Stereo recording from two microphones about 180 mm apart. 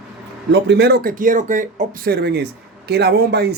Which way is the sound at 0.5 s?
70° right (ahead or behind).